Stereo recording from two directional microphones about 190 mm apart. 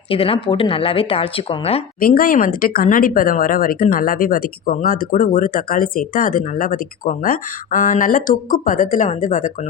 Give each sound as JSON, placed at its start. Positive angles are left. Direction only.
{"t": 0.1, "sound": "speech", "side_deg": 30}
{"t": 2.0, "sound": "speech", "side_deg": 50}